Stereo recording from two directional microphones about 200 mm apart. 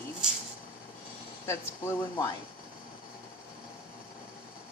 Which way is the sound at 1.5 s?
15° left (ahead or behind).